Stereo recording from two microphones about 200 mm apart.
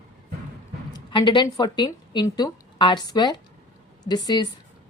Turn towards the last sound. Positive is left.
turn(degrees=20)  # may be behind; listen again after turning